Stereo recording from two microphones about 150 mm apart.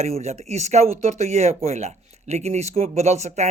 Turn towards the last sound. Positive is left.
turn(degrees=-50)  # may be behind; listen again after turning